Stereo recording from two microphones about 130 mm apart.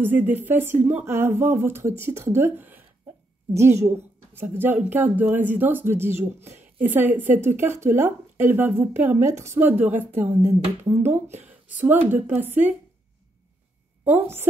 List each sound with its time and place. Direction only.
0.0 s speech: 15° right (ahead or behind)
10.3 s speech: 25° right (ahead or behind)
14.0 s speech: 15° right (ahead or behind)